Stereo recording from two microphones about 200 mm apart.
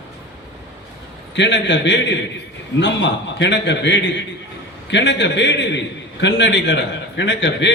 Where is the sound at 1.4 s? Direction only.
60° left (ahead or behind).